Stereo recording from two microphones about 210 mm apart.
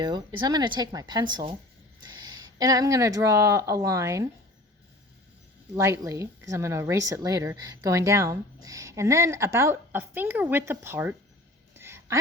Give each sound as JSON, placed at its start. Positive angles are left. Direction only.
{"t": 0.0, "sound": "speech", "side_deg": -20}
{"t": 5.7, "sound": "a woman's voice", "side_deg": -15}
{"t": 11.7, "sound": "a sound", "side_deg": -10}